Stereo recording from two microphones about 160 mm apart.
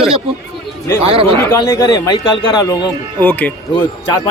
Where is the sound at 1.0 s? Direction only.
35° right (ahead or behind).